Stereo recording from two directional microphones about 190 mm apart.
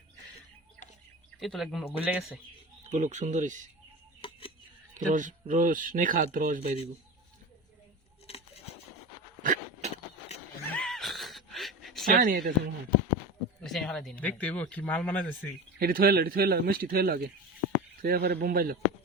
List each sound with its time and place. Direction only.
1.4 s speech: centre (ahead or behind)
2.9 s speech: 40° right (ahead or behind)
4.2 s a sound: 30° left (ahead or behind)
4.9 s speech: 40° right (ahead or behind)
9.4 s a sound: 45° right (ahead or behind)
10.8 s gasp: centre (ahead or behind)
12.0 s speech: 50° right (ahead or behind)
13.6 s speech: centre (ahead or behind)
15.8 s speech: 50° right (ahead or behind)